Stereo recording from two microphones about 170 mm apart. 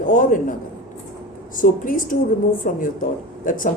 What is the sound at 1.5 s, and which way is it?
A woman's voice, 55° left (ahead or behind).